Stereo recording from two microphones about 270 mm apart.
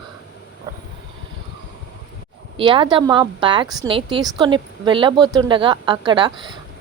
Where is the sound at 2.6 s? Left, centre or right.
Centre.